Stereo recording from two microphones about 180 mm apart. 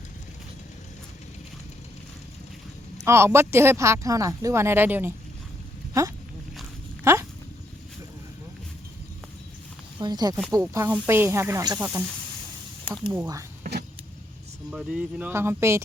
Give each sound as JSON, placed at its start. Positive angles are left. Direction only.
{"t": 3.0, "sound": "speech", "side_deg": -15}
{"t": 7.0, "sound": "a sound", "side_deg": -15}
{"t": 10.0, "sound": "speech", "side_deg": -20}
{"t": 12.9, "sound": "speech", "side_deg": -20}
{"t": 14.7, "sound": "speech", "side_deg": -5}